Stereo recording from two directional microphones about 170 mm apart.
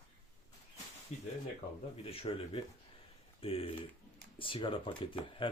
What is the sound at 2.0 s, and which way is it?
Speech, 35° left (ahead or behind).